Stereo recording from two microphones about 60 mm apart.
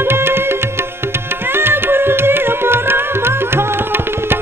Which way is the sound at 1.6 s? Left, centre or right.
Right.